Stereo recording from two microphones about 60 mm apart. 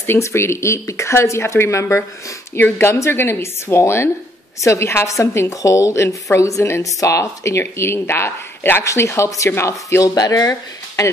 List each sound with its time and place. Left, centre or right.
0.0 s speech: left
2.5 s speech: left
5.5 s speech: left
10.0 s speech: left
11.0 s speech: left